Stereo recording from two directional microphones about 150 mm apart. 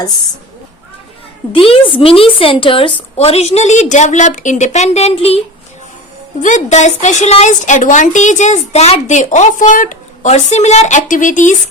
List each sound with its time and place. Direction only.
1.5 s speech: 40° left (ahead or behind)
6.4 s speech: 55° left (ahead or behind)